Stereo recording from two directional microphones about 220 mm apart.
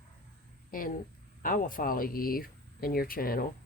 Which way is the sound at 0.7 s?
40° left (ahead or behind).